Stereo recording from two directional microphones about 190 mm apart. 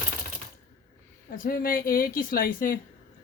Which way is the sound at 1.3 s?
50° left (ahead or behind).